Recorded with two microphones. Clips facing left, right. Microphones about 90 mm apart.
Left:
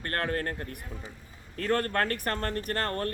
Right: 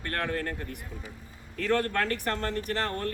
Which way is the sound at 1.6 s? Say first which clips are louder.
Even; 45° left (ahead or behind).